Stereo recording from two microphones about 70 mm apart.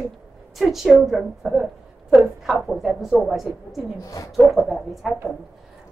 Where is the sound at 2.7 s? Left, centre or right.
Centre.